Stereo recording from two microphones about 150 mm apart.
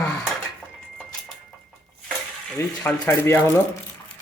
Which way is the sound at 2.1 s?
5° left (ahead or behind).